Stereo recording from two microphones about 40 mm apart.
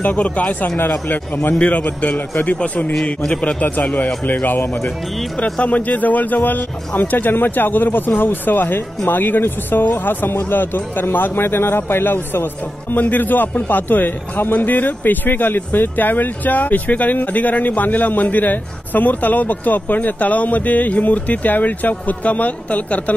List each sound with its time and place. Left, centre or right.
0.0 s speech: left
1.5 s speech: left
2.0 s speech: left
5.4 s speech: left
12.9 s speech: left